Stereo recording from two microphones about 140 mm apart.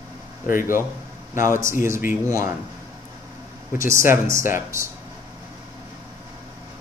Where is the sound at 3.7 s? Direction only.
20° right (ahead or behind).